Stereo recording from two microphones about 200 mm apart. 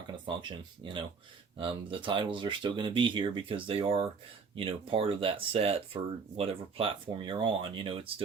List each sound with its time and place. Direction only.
0.1 s speech: 25° right (ahead or behind)